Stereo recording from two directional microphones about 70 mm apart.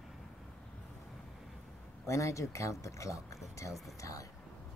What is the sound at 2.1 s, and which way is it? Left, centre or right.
Speech, left.